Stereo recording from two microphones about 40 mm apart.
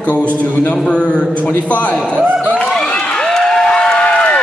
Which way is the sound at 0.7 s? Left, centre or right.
Left.